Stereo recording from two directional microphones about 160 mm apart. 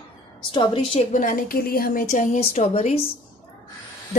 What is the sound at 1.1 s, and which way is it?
A woman's voice, 55° left (ahead or behind).